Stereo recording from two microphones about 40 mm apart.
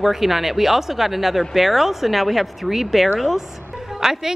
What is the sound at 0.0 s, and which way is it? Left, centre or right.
Speech, centre.